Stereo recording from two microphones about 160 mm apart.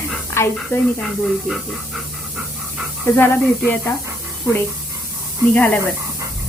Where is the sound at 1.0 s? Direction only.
Centre (ahead or behind).